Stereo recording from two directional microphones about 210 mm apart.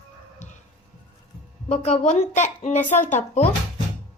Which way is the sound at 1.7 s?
30° left (ahead or behind).